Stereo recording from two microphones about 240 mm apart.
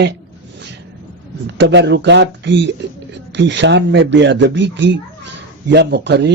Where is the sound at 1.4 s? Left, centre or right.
Right.